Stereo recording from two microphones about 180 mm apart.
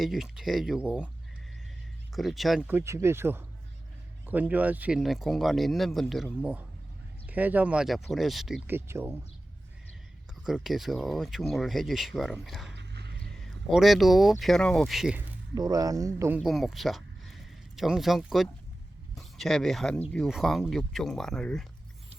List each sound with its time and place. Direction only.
0.0 s speech: centre (ahead or behind)
2.1 s speech: centre (ahead or behind)
8.6 s speech: 15° right (ahead or behind)
10.4 s speech: centre (ahead or behind)
12.7 s a sound: 70° right (ahead or behind)
13.3 s speech: centre (ahead or behind)
15.5 s speech: 20° right (ahead or behind)
16.4 s speech: centre (ahead or behind)